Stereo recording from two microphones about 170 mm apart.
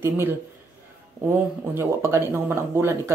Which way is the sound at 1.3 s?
15° right (ahead or behind).